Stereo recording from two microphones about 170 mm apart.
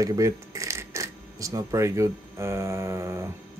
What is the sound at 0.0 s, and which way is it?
Speech, 20° right (ahead or behind).